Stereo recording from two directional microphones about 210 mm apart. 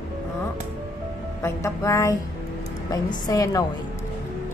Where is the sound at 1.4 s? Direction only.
15° left (ahead or behind).